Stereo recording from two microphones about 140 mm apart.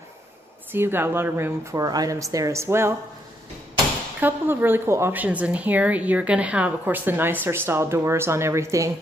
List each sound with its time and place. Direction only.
0.7 s speech: 15° right (ahead or behind)
4.2 s speech: 15° right (ahead or behind)